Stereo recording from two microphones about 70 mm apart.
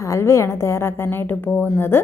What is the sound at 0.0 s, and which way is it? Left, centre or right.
A woman's voice, left.